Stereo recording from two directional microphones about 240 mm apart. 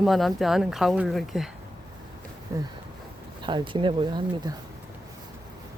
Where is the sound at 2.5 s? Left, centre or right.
Centre.